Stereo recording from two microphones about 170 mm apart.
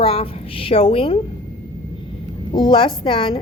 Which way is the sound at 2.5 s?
25° left (ahead or behind).